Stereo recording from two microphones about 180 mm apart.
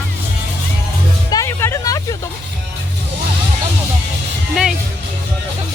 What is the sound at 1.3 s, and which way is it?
Music, 15° left (ahead or behind).